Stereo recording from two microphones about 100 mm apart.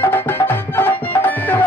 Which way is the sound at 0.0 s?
20° left (ahead or behind).